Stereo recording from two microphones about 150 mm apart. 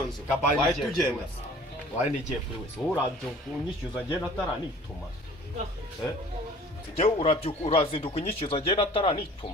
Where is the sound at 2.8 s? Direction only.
Centre (ahead or behind).